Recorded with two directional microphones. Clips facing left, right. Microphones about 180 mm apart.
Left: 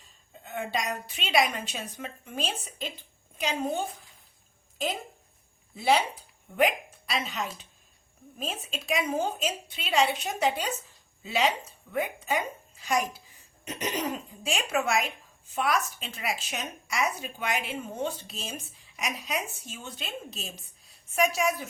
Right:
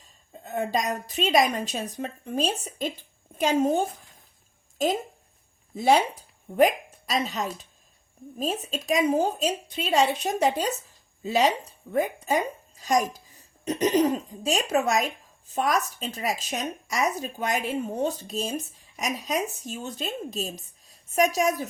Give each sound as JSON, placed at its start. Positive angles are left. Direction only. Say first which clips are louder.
{"t": 0.4, "sound": "a woman's voice", "louder": "right 5 dB", "side_deg": -40}
{"t": 5.7, "sound": "a woman's voice", "louder": "right 4 dB", "side_deg": -45}